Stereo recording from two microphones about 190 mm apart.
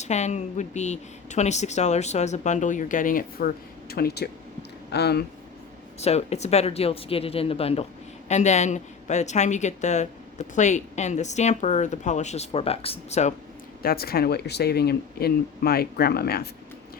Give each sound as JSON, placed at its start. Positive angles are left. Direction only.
{"t": 0.0, "sound": "a woman's voice", "side_deg": 35}
{"t": 6.0, "sound": "a woman's voice", "side_deg": 35}
{"t": 13.8, "sound": "speech", "side_deg": 55}